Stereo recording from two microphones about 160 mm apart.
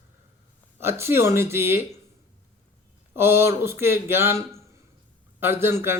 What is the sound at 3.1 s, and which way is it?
A man's voice, 15° right (ahead or behind).